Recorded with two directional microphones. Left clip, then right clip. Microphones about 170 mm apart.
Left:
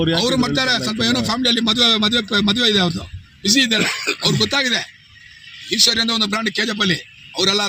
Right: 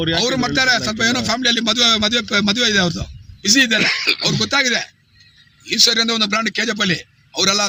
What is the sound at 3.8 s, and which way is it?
Speech, 70° left (ahead or behind).